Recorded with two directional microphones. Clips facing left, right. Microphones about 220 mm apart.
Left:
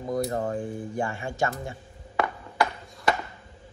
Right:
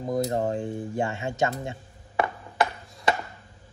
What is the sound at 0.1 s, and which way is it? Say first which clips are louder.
Speech: right 2 dB; 25° right (ahead or behind).